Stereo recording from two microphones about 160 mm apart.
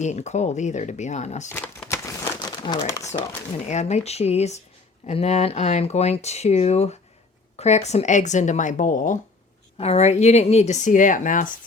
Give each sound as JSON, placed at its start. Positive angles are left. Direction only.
{"t": 0.0, "sound": "speech", "side_deg": 45}
{"t": 1.5, "sound": "crumpling", "side_deg": 10}
{"t": 3.7, "sound": "speech", "side_deg": 45}
{"t": 9.7, "sound": "speech", "side_deg": 40}